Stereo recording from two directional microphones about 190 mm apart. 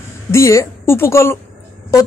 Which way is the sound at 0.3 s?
15° left (ahead or behind).